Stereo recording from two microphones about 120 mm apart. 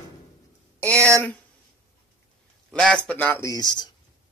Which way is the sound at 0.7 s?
15° left (ahead or behind).